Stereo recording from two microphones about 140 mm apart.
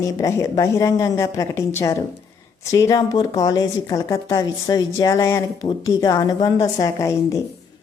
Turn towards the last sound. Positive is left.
turn(degrees=20)  # may be behind; listen again after turning